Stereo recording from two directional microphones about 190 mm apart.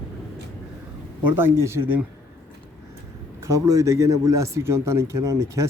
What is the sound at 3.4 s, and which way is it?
A man's voice, 15° right (ahead or behind).